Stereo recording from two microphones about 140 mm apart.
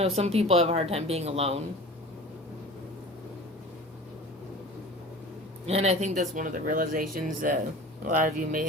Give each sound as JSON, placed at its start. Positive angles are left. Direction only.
{"t": 0.2, "sound": "speech", "side_deg": -45}
{"t": 5.6, "sound": "speech", "side_deg": -50}